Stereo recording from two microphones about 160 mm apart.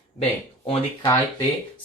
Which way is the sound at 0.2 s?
35° left (ahead or behind).